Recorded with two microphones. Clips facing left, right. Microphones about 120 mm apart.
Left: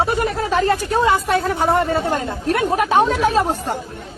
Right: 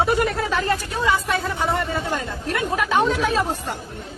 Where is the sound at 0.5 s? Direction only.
50° left (ahead or behind).